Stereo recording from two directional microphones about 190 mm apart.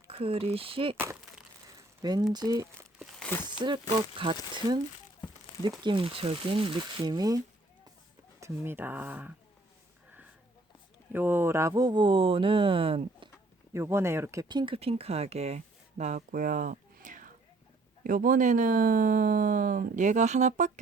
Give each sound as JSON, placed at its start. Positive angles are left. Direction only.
{"t": 0.1, "sound": "speech", "side_deg": -30}
{"t": 0.9, "sound": "crumpling", "side_deg": -10}
{"t": 2.0, "sound": "speech", "side_deg": -20}
{"t": 3.0, "sound": "speech", "side_deg": 5}
{"t": 3.4, "sound": "speech", "side_deg": -25}
{"t": 5.8, "sound": "speech", "side_deg": -25}
{"t": 11.1, "sound": "speech", "side_deg": -10}
{"t": 13.7, "sound": "speech", "side_deg": -15}